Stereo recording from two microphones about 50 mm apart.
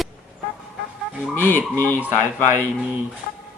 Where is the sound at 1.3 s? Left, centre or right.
Left.